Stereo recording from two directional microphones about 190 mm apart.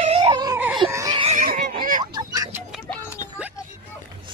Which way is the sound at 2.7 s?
5° right (ahead or behind).